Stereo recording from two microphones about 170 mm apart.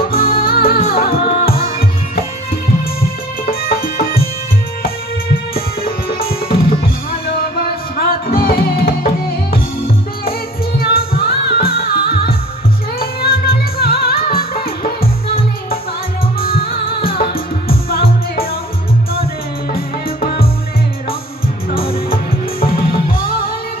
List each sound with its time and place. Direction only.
0.1 s music: 60° left (ahead or behind)
5.5 s music: 60° left (ahead or behind)
7.9 s music: 60° left (ahead or behind)
10.8 s music: 60° left (ahead or behind)
16.4 s music: 60° left (ahead or behind)
19.7 s music: 60° left (ahead or behind)
22.6 s music: 60° left (ahead or behind)